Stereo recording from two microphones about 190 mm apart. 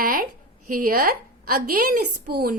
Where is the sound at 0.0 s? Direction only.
50° right (ahead or behind).